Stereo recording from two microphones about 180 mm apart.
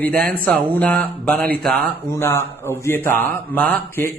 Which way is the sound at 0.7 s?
5° left (ahead or behind).